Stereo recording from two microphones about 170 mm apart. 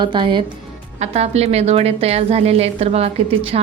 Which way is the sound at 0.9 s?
40° right (ahead or behind).